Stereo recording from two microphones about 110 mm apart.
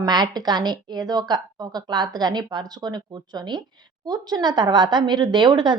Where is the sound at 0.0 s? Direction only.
40° right (ahead or behind).